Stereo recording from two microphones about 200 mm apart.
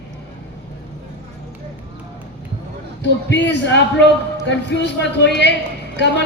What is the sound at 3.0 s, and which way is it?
Speech, 60° left (ahead or behind).